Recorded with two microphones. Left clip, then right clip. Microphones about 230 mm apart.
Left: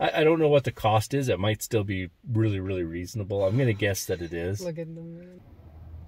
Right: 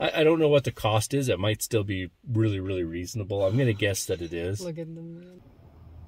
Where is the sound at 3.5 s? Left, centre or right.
Centre.